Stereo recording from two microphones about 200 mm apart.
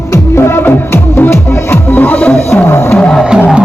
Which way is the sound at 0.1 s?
10° left (ahead or behind).